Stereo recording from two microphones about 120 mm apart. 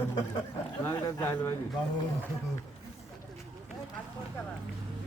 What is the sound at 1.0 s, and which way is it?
Speech, 15° left (ahead or behind).